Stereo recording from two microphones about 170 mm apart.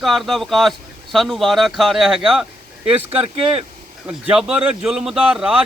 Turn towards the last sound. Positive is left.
turn(degrees=-5)  # may be behind; listen again after turning